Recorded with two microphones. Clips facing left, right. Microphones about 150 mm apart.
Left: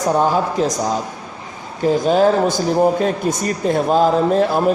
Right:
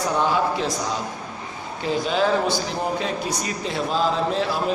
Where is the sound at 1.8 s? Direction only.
45° left (ahead or behind).